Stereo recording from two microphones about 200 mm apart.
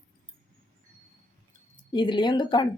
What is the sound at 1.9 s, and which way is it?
Speech, 20° left (ahead or behind).